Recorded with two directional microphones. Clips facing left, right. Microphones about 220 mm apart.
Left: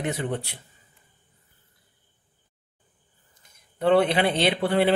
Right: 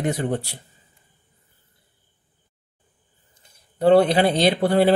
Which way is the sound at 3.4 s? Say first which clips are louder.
Right 5 dB; 30° right (ahead or behind).